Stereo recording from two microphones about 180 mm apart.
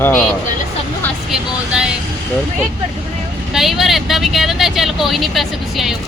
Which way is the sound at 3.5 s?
Centre (ahead or behind).